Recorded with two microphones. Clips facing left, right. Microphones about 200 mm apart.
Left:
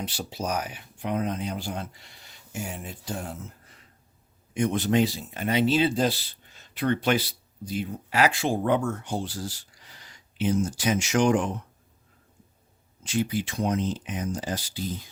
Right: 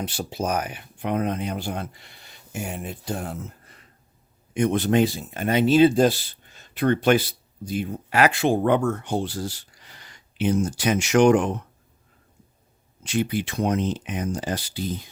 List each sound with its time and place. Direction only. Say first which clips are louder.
0.0 s speech: right 4 dB; 50° right (ahead or behind)
4.5 s speech: right 3 dB; 60° right (ahead or behind)
13.0 s speech: right 2 dB; 65° right (ahead or behind)